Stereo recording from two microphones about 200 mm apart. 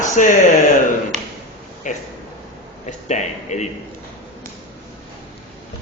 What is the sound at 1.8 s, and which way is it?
Speech, 40° left (ahead or behind).